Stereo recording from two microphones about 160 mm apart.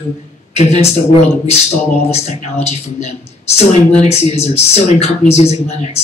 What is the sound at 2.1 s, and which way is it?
Speech, 40° left (ahead or behind).